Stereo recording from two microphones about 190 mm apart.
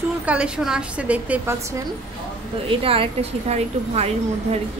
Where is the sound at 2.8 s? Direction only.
30° right (ahead or behind).